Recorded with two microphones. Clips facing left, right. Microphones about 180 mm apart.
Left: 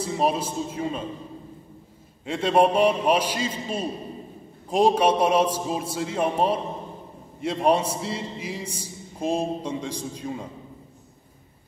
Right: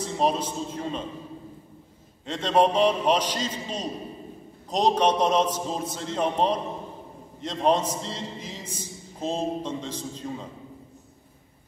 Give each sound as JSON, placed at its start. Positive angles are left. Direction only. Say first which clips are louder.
{"t": 0.0, "sound": "a man's voice", "louder": "left 1 dB", "side_deg": 10}
{"t": 2.2, "sound": "a man's voice", "louder": "left 2 dB", "side_deg": 10}